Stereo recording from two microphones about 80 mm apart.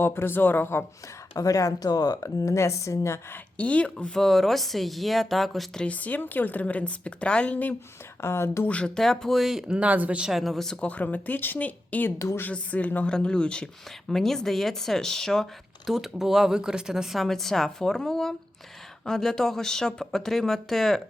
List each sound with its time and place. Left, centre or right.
0.0 s a woman's voice: left
1.3 s speech: left
3.3 s speech: centre
5.8 s a woman's voice: centre
8.2 s speech: left
8.6 s speech: centre
10.8 s a woman's voice: left
12.2 s speech: left
12.7 s a woman's voice: centre